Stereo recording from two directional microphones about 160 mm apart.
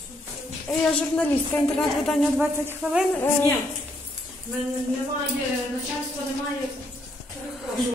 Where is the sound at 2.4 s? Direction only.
10° right (ahead or behind).